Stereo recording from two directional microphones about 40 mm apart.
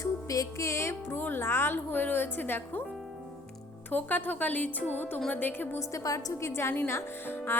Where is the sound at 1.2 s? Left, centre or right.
Left.